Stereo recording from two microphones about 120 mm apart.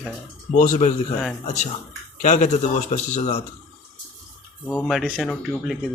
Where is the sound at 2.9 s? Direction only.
65° left (ahead or behind).